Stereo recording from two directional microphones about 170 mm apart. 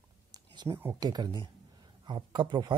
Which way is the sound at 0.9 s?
25° right (ahead or behind).